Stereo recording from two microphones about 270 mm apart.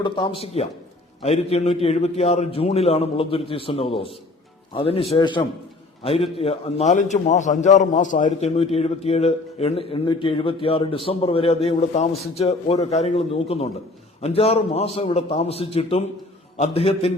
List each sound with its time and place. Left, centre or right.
0.0 s a man's voice: centre